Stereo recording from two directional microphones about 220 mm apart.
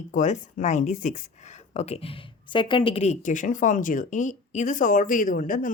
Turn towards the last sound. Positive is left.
turn(degrees=35)  # may be behind; listen again after turning